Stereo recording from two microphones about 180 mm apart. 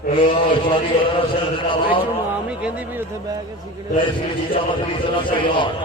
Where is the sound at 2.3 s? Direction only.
5° right (ahead or behind).